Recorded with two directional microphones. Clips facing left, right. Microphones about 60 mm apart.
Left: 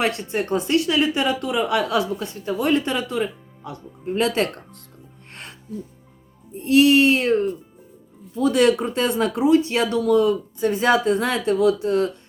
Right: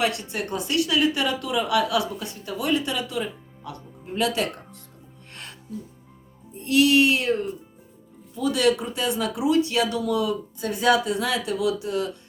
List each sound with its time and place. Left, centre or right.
0.0 s speech: left
6.6 s speech: left
8.4 s speech: left